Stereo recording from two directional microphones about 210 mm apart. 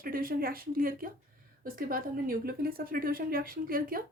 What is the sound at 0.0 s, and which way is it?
A woman's voice, 45° right (ahead or behind).